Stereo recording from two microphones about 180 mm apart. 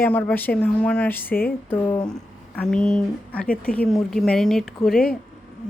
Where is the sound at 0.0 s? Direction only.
10° left (ahead or behind).